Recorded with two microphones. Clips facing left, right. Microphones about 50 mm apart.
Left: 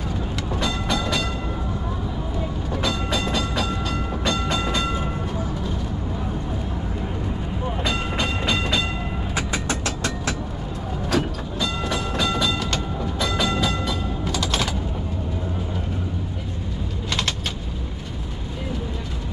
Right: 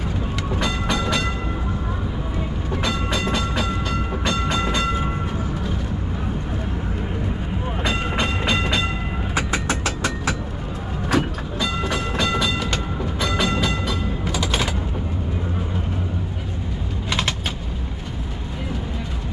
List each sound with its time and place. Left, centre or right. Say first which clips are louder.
0.6 s train: right 1 dB; centre
2.7 s train: right 1 dB; centre
7.8 s train: right 3 dB; right
9.3 s vehicle: right 3 dB; centre
11.1 s train: right 2 dB; centre
13.8 s music: right 1 dB; centre